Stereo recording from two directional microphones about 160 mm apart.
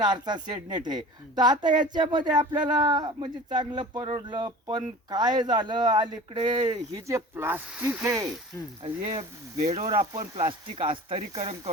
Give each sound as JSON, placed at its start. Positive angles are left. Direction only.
{"t": 0.0, "sound": "speech", "side_deg": -25}
{"t": 9.6, "sound": "speech", "side_deg": -45}